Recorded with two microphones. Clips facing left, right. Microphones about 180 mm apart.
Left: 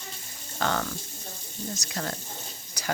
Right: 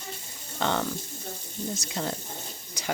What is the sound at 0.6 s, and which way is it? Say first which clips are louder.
Speech: right 1 dB; 25° right (ahead or behind).